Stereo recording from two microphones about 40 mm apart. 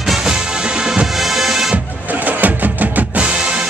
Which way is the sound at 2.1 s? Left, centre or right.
Right.